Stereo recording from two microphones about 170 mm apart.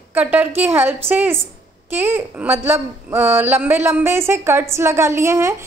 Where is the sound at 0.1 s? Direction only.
10° right (ahead or behind).